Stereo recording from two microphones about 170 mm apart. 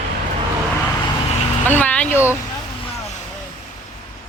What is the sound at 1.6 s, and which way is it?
Speech, 10° left (ahead or behind).